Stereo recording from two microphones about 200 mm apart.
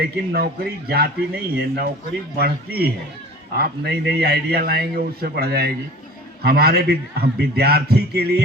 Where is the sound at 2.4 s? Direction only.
50° right (ahead or behind).